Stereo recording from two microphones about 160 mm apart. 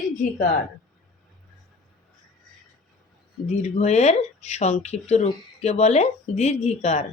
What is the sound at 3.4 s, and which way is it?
Speech, 45° left (ahead or behind).